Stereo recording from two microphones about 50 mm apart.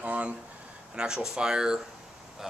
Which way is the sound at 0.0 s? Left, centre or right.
Right.